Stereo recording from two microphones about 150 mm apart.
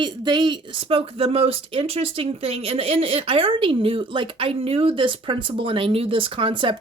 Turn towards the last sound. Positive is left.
turn(degrees=-35)  # may be behind; listen again after turning